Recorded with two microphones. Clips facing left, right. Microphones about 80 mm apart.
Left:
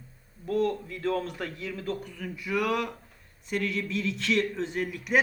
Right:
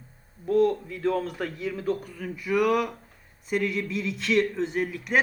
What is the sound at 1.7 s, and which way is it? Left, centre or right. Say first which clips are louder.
Speech: right 6 dB; centre.